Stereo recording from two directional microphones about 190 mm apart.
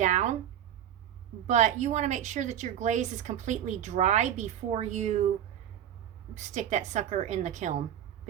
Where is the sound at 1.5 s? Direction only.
40° right (ahead or behind).